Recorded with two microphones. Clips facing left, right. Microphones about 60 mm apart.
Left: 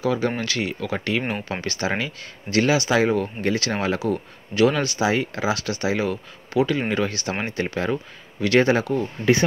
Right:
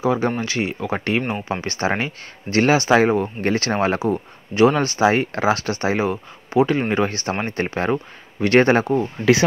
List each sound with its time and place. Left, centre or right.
0.0 s speech: right
9.2 s speech: right